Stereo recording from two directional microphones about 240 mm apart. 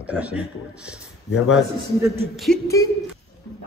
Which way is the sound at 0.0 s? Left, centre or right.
Centre.